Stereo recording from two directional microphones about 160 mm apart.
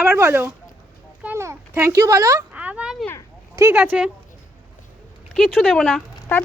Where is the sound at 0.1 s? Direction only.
15° right (ahead or behind).